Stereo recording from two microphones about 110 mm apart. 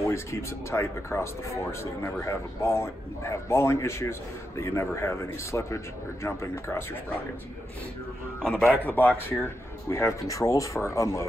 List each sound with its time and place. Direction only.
0.0 s speech: 25° left (ahead or behind)
8.4 s a man's voice: 5° left (ahead or behind)
8.8 s speech: 20° left (ahead or behind)